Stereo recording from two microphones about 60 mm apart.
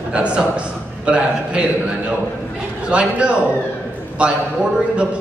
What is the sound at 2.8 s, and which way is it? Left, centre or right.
A man's voice, centre.